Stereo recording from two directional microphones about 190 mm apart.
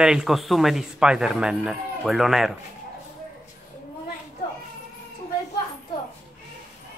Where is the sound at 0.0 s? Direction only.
5° right (ahead or behind).